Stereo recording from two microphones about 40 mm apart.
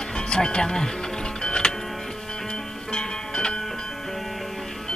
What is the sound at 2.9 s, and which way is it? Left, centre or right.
Music, left.